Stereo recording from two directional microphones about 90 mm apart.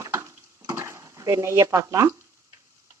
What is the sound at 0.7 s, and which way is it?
Speech, 30° right (ahead or behind).